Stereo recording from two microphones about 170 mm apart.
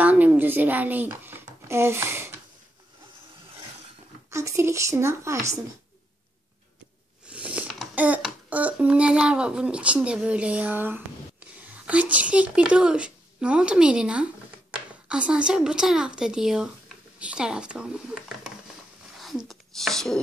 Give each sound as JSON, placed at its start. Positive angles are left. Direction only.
{"t": 0.0, "sound": "a sound", "side_deg": -10}
{"t": 4.3, "sound": "speech", "side_deg": -15}
{"t": 7.2, "sound": "a child's voice", "side_deg": -5}
{"t": 19.1, "sound": "whispering", "side_deg": 0}